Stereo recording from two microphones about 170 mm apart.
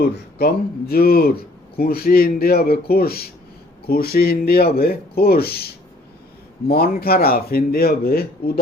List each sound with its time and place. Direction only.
0.0 s speech: 65° left (ahead or behind)